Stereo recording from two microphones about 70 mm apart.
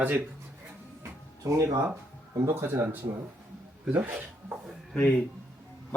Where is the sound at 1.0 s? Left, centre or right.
Right.